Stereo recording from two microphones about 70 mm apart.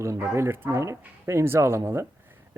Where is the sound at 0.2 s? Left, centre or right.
Right.